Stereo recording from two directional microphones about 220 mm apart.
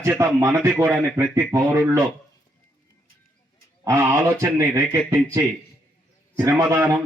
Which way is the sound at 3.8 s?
15° right (ahead or behind).